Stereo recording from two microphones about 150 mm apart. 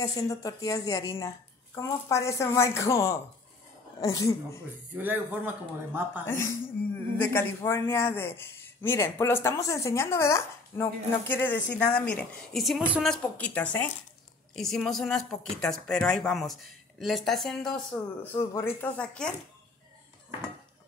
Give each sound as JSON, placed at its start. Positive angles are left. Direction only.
{"t": 0.0, "sound": "a woman's voice", "side_deg": 25}
{"t": 4.9, "sound": "speech", "side_deg": -10}
{"t": 6.2, "sound": "a woman's voice", "side_deg": 15}
{"t": 18.3, "sound": "speech", "side_deg": 15}